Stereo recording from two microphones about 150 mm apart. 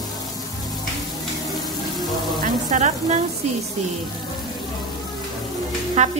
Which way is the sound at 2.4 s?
55° right (ahead or behind).